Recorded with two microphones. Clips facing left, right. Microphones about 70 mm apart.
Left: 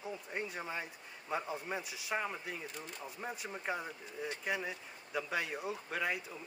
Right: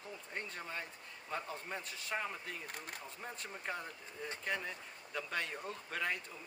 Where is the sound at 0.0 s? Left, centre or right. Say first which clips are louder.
Left 5 dB; centre.